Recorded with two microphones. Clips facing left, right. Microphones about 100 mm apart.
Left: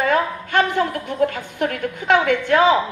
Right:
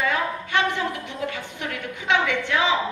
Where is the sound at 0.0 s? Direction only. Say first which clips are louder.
Left 5 dB; 50° left (ahead or behind).